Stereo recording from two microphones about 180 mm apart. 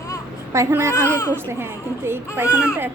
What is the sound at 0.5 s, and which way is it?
Speech, 15° right (ahead or behind).